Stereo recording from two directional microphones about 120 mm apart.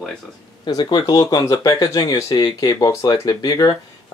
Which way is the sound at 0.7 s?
35° left (ahead or behind).